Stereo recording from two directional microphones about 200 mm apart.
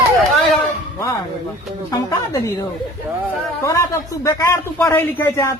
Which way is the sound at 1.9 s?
15° left (ahead or behind).